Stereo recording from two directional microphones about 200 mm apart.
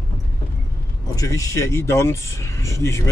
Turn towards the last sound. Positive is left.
turn(degrees=15)  # may be behind; listen again after turning